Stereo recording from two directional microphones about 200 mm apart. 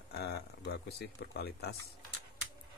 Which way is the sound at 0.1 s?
55° left (ahead or behind).